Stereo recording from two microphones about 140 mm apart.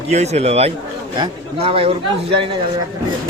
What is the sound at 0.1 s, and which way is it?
Speech, 50° right (ahead or behind).